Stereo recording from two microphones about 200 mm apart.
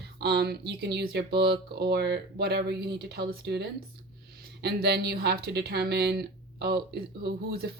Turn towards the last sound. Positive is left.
turn(degrees=-50)  # may be behind; listen again after turning